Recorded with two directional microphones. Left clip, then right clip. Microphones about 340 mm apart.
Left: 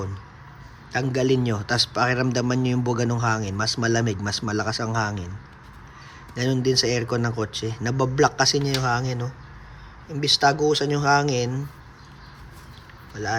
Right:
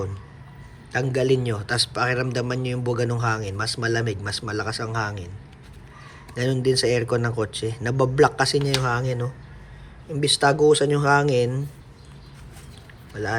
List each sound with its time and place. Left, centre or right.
0.9 s a man's voice: centre
6.3 s a man's voice: centre